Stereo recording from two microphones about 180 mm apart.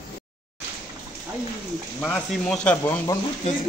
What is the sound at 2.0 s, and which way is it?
Speech, 5° left (ahead or behind).